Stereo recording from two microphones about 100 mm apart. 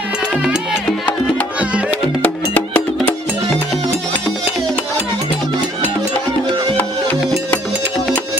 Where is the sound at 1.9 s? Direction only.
15° left (ahead or behind).